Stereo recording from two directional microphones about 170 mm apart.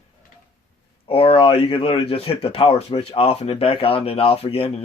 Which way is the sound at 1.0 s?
35° left (ahead or behind).